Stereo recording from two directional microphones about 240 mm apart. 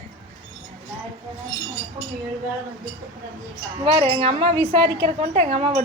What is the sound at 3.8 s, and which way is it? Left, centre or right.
A woman's voice, right.